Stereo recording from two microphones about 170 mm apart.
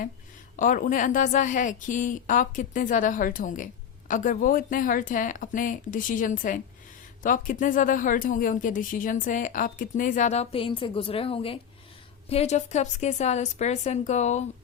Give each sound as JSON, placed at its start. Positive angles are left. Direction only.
{"t": 0.5, "sound": "a woman's voice", "side_deg": 50}